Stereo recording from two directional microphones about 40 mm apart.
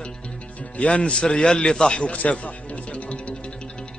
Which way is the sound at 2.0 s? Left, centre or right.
Left.